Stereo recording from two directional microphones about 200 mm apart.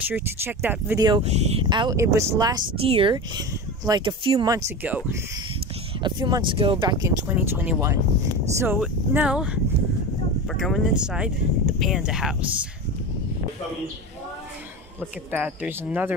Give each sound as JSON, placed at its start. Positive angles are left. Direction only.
{"t": 0.1, "sound": "speech", "side_deg": -10}
{"t": 1.0, "sound": "speech", "side_deg": -30}
{"t": 6.0, "sound": "speech", "side_deg": -20}
{"t": 15.0, "sound": "speech", "side_deg": -5}